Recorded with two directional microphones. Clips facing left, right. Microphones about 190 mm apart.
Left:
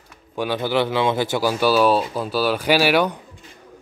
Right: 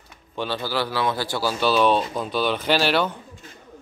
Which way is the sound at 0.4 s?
15° left (ahead or behind).